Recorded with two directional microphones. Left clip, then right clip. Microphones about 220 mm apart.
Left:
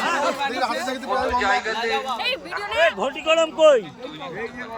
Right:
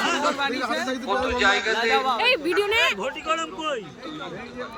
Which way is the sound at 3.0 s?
20° left (ahead or behind).